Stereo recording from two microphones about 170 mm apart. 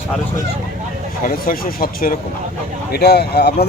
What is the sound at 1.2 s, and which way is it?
Speech, 55° left (ahead or behind).